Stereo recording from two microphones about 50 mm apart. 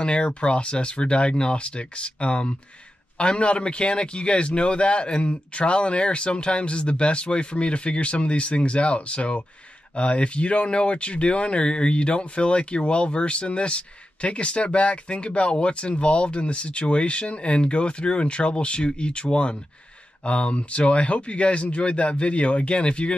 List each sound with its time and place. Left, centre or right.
0.0 s speech: left